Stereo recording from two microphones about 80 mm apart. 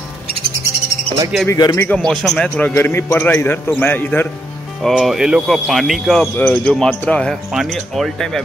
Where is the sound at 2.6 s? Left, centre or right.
Left.